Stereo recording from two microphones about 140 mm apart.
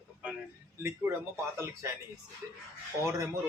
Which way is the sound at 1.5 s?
20° right (ahead or behind).